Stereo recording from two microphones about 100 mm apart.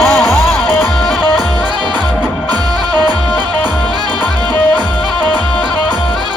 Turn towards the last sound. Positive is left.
turn(degrees=15)  # may be behind; listen again after turning